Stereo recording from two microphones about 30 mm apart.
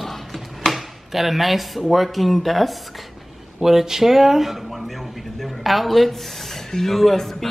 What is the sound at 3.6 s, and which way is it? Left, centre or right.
Speech, centre.